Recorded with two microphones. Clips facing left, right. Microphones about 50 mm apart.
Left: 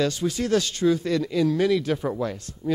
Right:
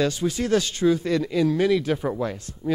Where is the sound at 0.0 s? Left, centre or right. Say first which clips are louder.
Right 1 dB; centre.